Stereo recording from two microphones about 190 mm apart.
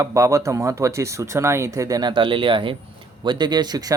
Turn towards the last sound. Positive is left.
turn(degrees=-20)  # may be behind; listen again after turning